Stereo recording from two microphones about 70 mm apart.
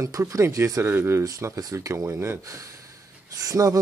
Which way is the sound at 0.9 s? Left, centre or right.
Right.